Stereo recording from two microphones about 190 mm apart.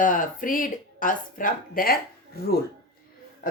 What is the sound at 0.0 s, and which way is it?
Speech, 45° left (ahead or behind).